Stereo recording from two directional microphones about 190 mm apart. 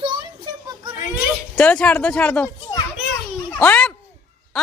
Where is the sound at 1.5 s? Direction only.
5° left (ahead or behind).